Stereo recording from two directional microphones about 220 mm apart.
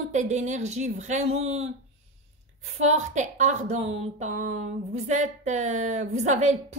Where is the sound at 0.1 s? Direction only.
30° right (ahead or behind).